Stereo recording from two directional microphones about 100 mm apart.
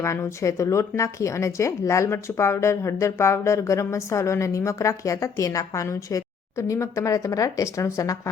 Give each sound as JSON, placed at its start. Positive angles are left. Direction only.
{"t": 0.0, "sound": "speech", "side_deg": 30}